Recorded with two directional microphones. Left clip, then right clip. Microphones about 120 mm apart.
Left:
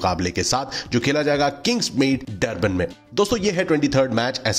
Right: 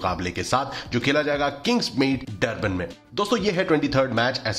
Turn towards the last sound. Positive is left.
turn(degrees=40)  # may be behind; listen again after turning